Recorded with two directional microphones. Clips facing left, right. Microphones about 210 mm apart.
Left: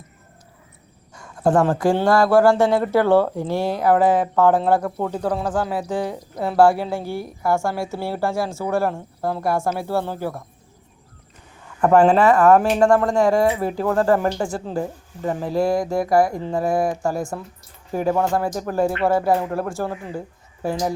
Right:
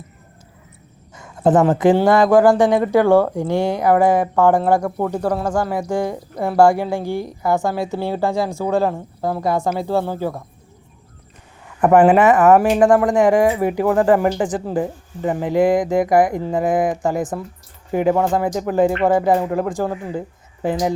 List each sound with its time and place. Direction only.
1.1 s speech: 20° right (ahead or behind)
11.8 s speech: 15° right (ahead or behind)